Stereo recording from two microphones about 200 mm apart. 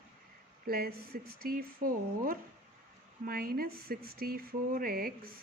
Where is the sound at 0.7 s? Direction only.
50° right (ahead or behind).